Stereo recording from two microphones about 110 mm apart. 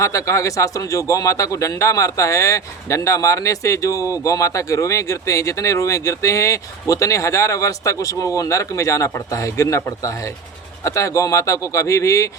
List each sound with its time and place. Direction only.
0.0 s speech: 30° left (ahead or behind)